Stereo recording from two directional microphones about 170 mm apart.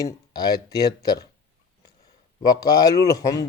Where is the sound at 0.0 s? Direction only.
20° left (ahead or behind).